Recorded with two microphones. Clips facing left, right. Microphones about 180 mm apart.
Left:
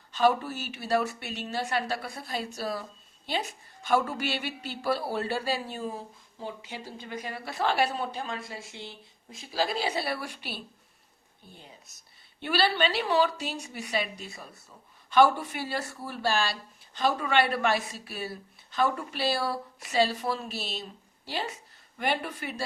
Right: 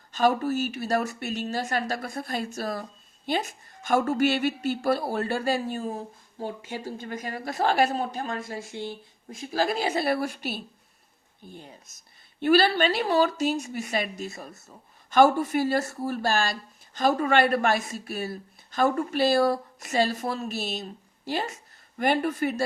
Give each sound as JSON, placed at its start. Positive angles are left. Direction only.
{"t": 0.1, "sound": "speech", "side_deg": -45}
{"t": 12.4, "sound": "speech", "side_deg": -45}